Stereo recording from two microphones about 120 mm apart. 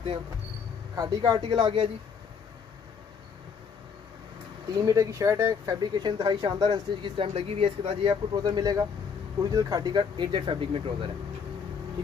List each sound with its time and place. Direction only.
0.9 s speech: 35° right (ahead or behind)
4.7 s speech: 30° right (ahead or behind)
7.2 s speech: 55° right (ahead or behind)
8.0 s speech: 40° right (ahead or behind)